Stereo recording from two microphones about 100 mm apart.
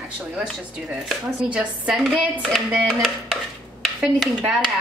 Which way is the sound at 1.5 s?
10° right (ahead or behind).